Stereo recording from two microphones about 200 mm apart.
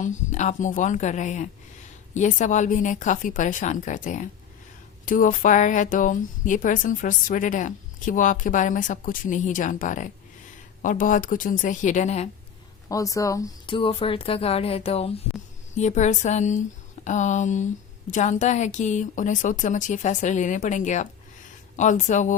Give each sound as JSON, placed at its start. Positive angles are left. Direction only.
{"t": 0.0, "sound": "speech", "side_deg": 40}
{"t": 12.9, "sound": "speech", "side_deg": 15}